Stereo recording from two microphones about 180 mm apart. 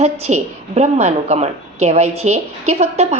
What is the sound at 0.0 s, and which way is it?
A woman's voice, 40° right (ahead or behind).